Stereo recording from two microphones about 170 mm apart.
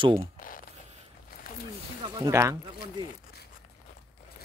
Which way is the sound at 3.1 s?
65° left (ahead or behind).